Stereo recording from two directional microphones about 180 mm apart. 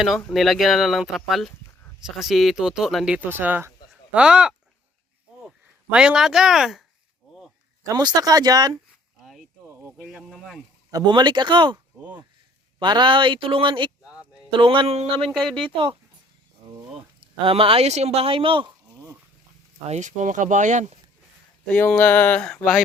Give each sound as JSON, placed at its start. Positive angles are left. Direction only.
{"t": 0.0, "sound": "speech", "side_deg": 5}
{"t": 7.9, "sound": "speech", "side_deg": -20}
{"t": 9.2, "sound": "a sound", "side_deg": 0}
{"t": 9.6, "sound": "a sound", "side_deg": -15}
{"t": 10.1, "sound": "speech", "side_deg": 0}
{"t": 10.9, "sound": "speech", "side_deg": -25}
{"t": 12.8, "sound": "speech", "side_deg": -25}
{"t": 15.3, "sound": "speech", "side_deg": 0}
{"t": 15.7, "sound": "speech", "side_deg": -30}
{"t": 17.2, "sound": "speech", "side_deg": -30}
{"t": 19.9, "sound": "speech", "side_deg": -40}
{"t": 21.7, "sound": "a sound", "side_deg": 5}